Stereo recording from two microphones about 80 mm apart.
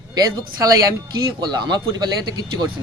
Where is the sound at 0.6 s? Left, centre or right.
Right.